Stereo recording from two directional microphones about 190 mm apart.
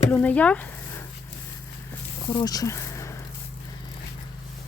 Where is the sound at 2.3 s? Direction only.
20° left (ahead or behind).